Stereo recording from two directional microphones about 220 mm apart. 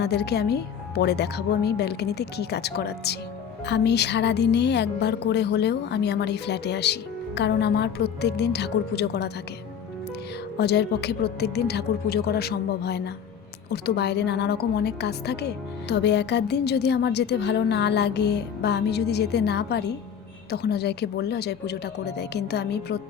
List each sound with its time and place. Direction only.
0.0 s a woman's voice: 50° left (ahead or behind)
10.6 s a woman's voice: 50° left (ahead or behind)